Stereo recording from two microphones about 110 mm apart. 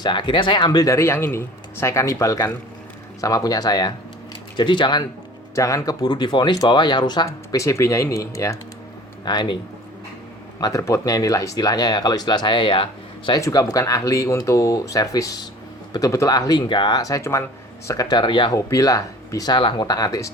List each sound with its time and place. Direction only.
0.0 s speech: 45° left (ahead or behind)
0.9 s speech: 25° left (ahead or behind); by 5.0 s 45° left (ahead or behind)
5.5 s speech: 30° left (ahead or behind)
7.3 s speech: 25° left (ahead or behind)
9.2 s speech: 40° left (ahead or behind)
10.6 s speech: 30° left (ahead or behind); by 13.3 s 50° left (ahead or behind)
13.3 s speech: 35° left (ahead or behind)
16.6 s speech: 45° left (ahead or behind)
17.0 s speech: 30° left (ahead or behind); by 18.5 s 45° left (ahead or behind)
18.5 s speech: 30° left (ahead or behind)
19.5 s speech: 50° left (ahead or behind)
19.9 s speech: 30° left (ahead or behind)